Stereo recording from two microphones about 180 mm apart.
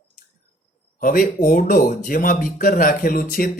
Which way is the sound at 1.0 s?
50° left (ahead or behind).